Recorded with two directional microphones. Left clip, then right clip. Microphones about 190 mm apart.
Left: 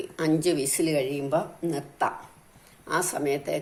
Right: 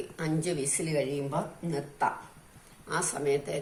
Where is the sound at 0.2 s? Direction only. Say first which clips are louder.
Left 8 dB; 50° left (ahead or behind).